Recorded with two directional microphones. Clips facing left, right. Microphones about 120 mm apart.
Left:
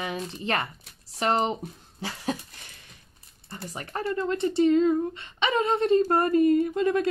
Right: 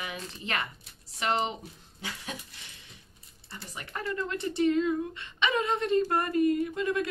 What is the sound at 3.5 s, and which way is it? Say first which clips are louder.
Speech: left 6 dB; 40° left (ahead or behind).